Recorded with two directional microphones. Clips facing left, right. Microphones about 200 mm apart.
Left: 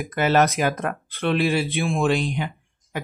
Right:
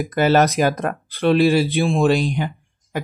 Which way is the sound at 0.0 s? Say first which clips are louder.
Right 3 dB; 35° right (ahead or behind).